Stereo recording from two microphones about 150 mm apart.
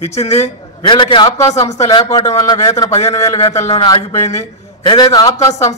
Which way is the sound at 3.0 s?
45° left (ahead or behind).